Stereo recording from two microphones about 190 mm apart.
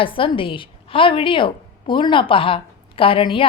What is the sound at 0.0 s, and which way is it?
Speech, 25° left (ahead or behind).